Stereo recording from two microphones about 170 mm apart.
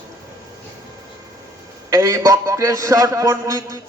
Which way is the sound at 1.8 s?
20° right (ahead or behind).